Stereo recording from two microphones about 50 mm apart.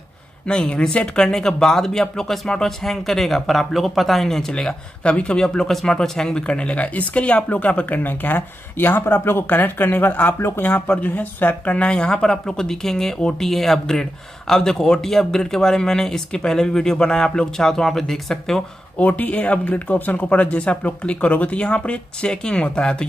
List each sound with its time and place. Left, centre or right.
0.5 s speech: centre
5.4 s speech: centre; by 11.9 s left
11.9 s speech: centre
18.9 s speech: left